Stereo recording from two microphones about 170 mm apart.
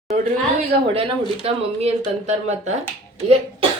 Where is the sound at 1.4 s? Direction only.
40° right (ahead or behind).